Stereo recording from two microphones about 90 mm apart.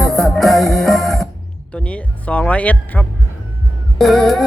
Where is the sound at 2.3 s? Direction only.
15° left (ahead or behind).